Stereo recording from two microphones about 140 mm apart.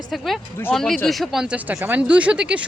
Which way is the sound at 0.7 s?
Centre (ahead or behind).